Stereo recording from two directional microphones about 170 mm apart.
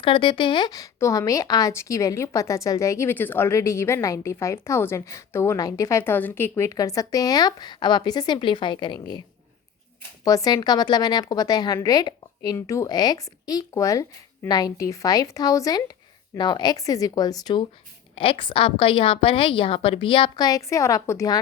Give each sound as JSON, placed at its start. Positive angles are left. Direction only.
{"t": 0.0, "sound": "a woman's voice", "side_deg": 30}
{"t": 10.2, "sound": "a woman's voice", "side_deg": 20}